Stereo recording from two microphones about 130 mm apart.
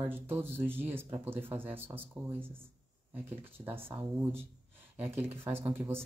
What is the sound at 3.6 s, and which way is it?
Speech, 15° right (ahead or behind).